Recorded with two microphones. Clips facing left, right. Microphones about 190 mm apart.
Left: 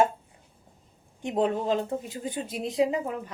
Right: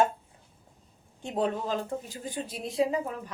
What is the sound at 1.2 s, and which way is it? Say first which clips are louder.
Speech: left 3 dB; 20° left (ahead or behind).